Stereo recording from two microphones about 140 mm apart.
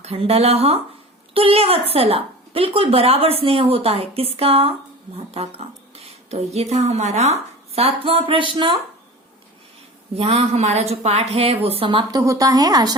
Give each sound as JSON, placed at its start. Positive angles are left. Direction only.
{"t": 0.0, "sound": "a woman's voice", "side_deg": -45}
{"t": 10.2, "sound": "a woman's voice", "side_deg": -45}
{"t": 12.2, "sound": "a woman's voice", "side_deg": -25}